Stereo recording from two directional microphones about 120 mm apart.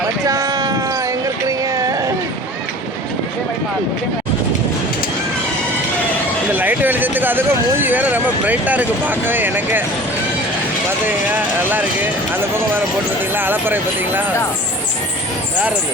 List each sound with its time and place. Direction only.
0.3 s a sound: 30° right (ahead or behind)
6.5 s speech: 15° right (ahead or behind)
11.0 s speech: 15° right (ahead or behind)